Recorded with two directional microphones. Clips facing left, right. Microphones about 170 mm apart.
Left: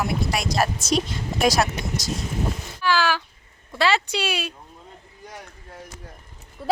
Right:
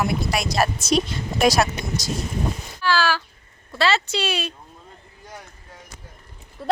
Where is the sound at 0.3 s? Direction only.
70° right (ahead or behind).